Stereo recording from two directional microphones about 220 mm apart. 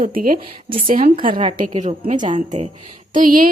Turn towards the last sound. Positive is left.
turn(degrees=-40)  # may be behind; listen again after turning